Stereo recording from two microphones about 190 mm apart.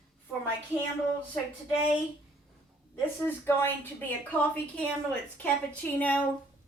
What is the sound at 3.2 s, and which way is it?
A woman's voice, 10° left (ahead or behind).